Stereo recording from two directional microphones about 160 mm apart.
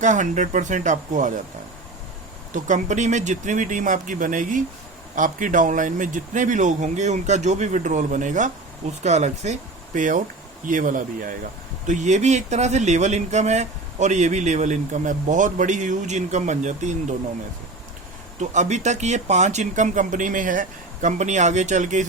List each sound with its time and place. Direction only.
0.0 s speech: 50° right (ahead or behind)
2.6 s speech: 50° right (ahead or behind)
18.3 s speech: 50° right (ahead or behind)